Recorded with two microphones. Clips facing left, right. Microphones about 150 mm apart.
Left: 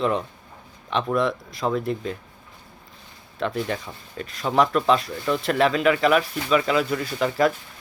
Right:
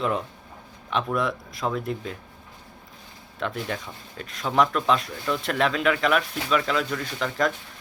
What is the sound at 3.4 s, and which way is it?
Speech, centre (ahead or behind).